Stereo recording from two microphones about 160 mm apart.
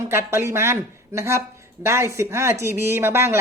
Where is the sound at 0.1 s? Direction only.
15° right (ahead or behind).